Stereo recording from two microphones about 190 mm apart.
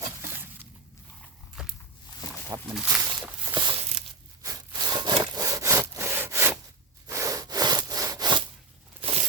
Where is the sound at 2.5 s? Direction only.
20° right (ahead or behind).